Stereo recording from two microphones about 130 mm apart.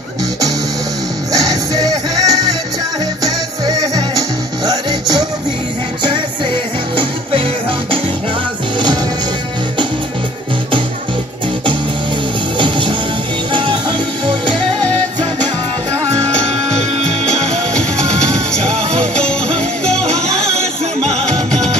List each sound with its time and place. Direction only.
1.3 s music: 25° right (ahead or behind)
3.3 s music: 25° right (ahead or behind)
6.0 s music: 40° right (ahead or behind)
8.7 s music: 35° right (ahead or behind)
12.5 s music: 35° right (ahead or behind)
18.9 s music: 5° left (ahead or behind)